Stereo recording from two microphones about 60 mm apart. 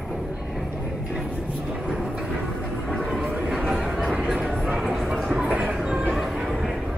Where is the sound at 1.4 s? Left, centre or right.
Centre.